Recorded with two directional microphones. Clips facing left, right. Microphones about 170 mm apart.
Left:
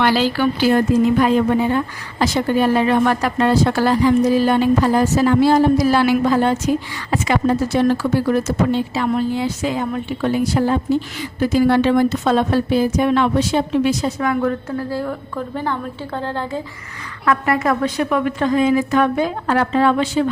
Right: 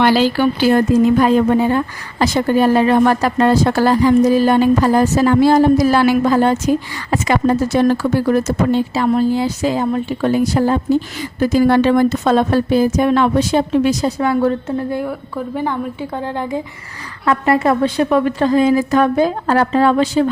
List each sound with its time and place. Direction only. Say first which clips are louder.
0.0 s speech: right 4 dB; 15° right (ahead or behind)
1.2 s a woman's voice: right 3 dB; 40° right (ahead or behind); by 15.0 s 20° right (ahead or behind)
15.0 s a woman's voice: right 2 dB; 10° right (ahead or behind)
17.2 s a woman's voice: right 3 dB; 30° right (ahead or behind)